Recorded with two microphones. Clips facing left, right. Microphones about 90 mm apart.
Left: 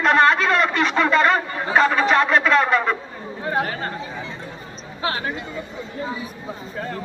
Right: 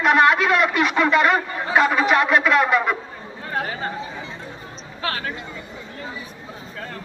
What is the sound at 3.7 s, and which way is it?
Chatter, 5° right (ahead or behind).